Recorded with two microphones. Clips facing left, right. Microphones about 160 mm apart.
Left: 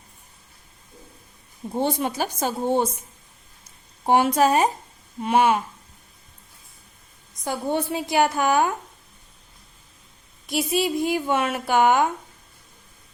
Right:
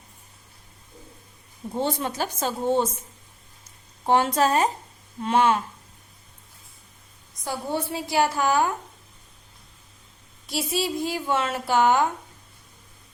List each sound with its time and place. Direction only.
1.7 s a woman's voice: 15° left (ahead or behind)
4.0 s a woman's voice: 10° left (ahead or behind)
7.4 s a woman's voice: 20° left (ahead or behind)
10.4 s a woman's voice: 15° left (ahead or behind)